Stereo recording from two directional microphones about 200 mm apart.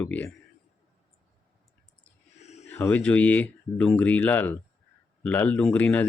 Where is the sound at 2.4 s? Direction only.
35° left (ahead or behind).